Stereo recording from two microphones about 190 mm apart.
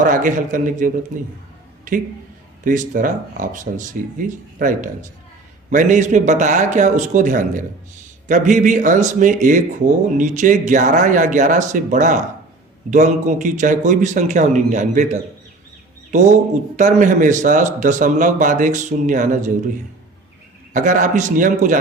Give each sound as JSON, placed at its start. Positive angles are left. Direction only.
{"t": 0.0, "sound": "speech", "side_deg": -45}
{"t": 2.6, "sound": "speech", "side_deg": -45}
{"t": 20.7, "sound": "speech", "side_deg": -45}